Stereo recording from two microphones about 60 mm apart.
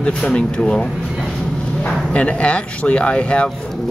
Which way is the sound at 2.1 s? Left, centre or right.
Left.